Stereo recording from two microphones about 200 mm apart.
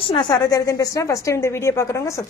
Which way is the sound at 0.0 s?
25° left (ahead or behind).